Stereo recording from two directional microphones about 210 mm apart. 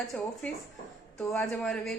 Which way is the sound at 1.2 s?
5° left (ahead or behind).